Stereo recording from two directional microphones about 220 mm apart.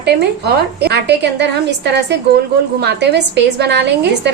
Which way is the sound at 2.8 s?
50° right (ahead or behind).